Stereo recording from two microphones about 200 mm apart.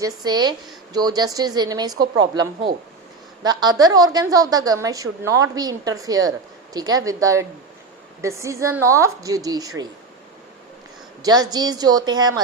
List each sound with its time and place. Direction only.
0.2 s a woman's voice: 20° right (ahead or behind)
11.2 s a woman's voice: 20° right (ahead or behind)